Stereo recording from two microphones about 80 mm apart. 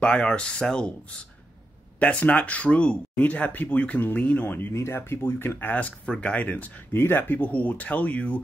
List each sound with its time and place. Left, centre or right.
0.0 s speech: centre
2.0 s speech: centre